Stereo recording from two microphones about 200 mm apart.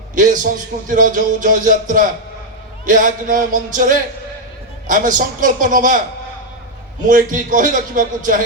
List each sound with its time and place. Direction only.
0.2 s a man's voice: 40° right (ahead or behind)
7.1 s a man's voice: 40° right (ahead or behind)